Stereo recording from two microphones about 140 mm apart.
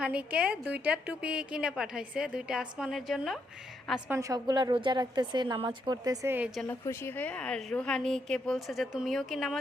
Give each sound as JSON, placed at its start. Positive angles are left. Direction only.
{"t": 0.0, "sound": "a woman's voice", "side_deg": -10}
{"t": 4.1, "sound": "a woman's voice", "side_deg": -25}
{"t": 6.2, "sound": "a woman's voice", "side_deg": -15}
{"t": 6.7, "sound": "a woman's voice", "side_deg": 15}